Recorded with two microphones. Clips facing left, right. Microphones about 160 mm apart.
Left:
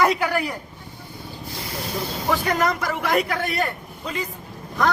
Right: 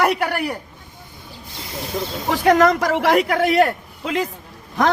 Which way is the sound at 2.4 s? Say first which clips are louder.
Right 8 dB; 65° right (ahead or behind).